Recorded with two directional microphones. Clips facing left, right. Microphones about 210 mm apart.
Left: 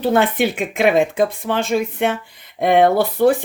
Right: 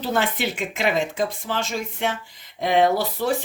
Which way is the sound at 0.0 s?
55° left (ahead or behind).